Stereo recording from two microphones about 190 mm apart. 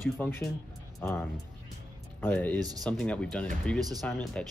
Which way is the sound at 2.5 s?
20° right (ahead or behind).